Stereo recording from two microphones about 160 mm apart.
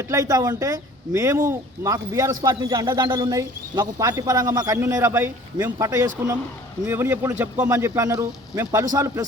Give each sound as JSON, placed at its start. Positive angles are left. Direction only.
{"t": 0.0, "sound": "a man's voice", "side_deg": -20}